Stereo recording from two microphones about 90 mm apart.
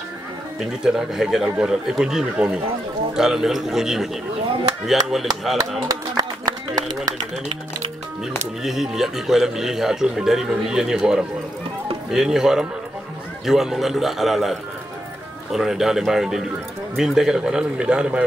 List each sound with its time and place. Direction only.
0.8 s speech: 5° right (ahead or behind)
6.1 s a sound: 45° right (ahead or behind)
8.6 s a man's voice: 5° right (ahead or behind)